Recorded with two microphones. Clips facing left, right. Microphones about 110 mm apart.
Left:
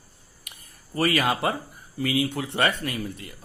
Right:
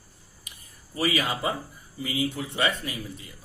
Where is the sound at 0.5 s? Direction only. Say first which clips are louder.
Left 2 dB; 60° left (ahead or behind).